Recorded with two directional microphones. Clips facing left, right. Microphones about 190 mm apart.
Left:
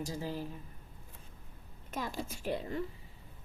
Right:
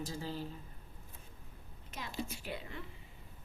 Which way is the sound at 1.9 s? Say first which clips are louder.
Left 4 dB; 45° left (ahead or behind).